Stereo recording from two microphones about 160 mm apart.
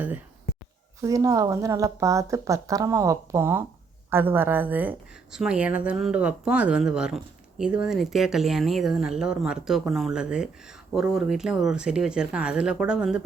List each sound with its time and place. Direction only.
1.0 s a woman's voice: 20° right (ahead or behind); by 13.2 s 5° right (ahead or behind)